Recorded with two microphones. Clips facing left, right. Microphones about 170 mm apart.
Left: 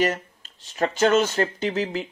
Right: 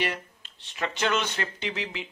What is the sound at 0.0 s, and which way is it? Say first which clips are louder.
Speech: left 7 dB; 40° left (ahead or behind).